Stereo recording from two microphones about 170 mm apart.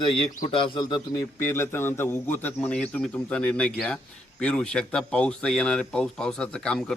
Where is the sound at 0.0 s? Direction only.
30° left (ahead or behind).